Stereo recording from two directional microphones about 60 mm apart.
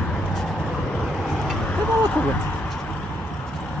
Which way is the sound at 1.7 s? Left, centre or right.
Left.